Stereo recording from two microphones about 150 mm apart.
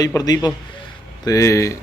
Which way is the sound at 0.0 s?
25° left (ahead or behind).